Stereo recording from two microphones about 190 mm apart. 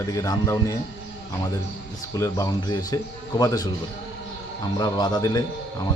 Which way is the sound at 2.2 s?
15° left (ahead or behind).